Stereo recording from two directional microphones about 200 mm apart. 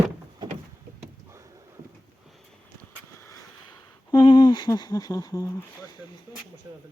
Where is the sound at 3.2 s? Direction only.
15° left (ahead or behind).